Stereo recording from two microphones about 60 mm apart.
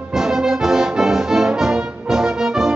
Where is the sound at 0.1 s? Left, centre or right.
Centre.